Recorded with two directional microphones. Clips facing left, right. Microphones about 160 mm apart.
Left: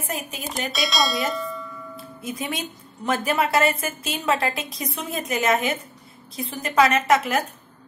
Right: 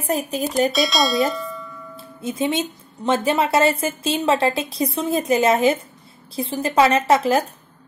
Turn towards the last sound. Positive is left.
turn(degrees=-30)  # may be behind; listen again after turning